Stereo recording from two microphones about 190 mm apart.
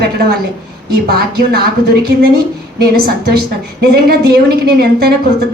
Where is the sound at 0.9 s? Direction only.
55° right (ahead or behind).